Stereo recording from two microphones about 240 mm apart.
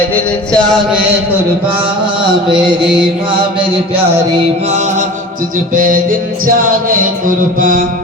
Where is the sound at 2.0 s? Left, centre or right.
Centre.